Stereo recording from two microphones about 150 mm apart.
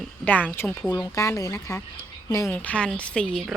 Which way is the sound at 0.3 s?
10° left (ahead or behind).